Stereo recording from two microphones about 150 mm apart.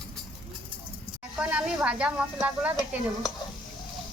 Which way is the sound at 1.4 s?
5° right (ahead or behind).